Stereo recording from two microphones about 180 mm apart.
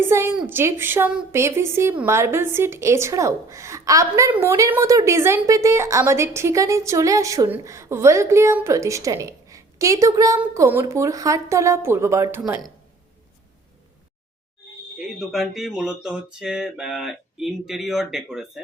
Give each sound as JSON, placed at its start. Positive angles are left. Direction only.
{"t": 0.0, "sound": "a woman's voice", "side_deg": -15}
{"t": 14.9, "sound": "speech", "side_deg": 0}